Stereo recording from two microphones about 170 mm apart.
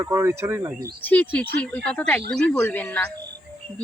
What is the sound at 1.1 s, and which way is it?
Speech, 10° left (ahead or behind).